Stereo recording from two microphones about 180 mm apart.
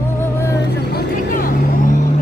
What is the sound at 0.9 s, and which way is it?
Vehicle, 50° left (ahead or behind).